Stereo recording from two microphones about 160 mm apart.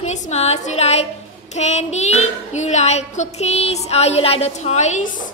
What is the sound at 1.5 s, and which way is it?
Child singing, 45° left (ahead or behind).